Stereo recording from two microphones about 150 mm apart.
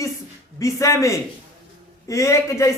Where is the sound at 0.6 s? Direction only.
20° left (ahead or behind).